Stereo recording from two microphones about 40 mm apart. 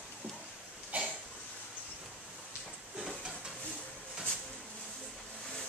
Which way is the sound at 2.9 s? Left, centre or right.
Centre.